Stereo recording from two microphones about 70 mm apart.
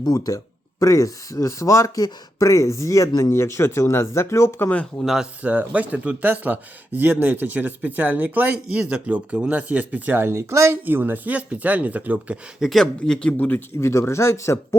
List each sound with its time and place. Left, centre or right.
0.0 s speech: left
4.6 s speech: left
5.0 s speech: centre
5.4 s speech: right
10.7 s speech: right
12.5 s speech: centre
12.8 s speech: centre
13.3 s speech: left
13.8 s speech: left